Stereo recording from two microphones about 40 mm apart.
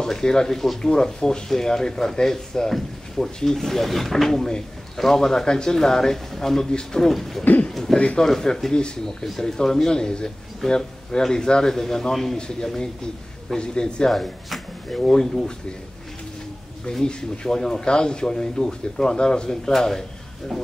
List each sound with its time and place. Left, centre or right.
0.0 s speech: centre
7.0 s speech: centre
12.4 s speech: centre
14.0 s speech: centre
17.0 s speech: left